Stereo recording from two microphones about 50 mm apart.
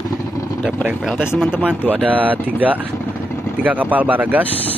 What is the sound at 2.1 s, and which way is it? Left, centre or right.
Speech, right.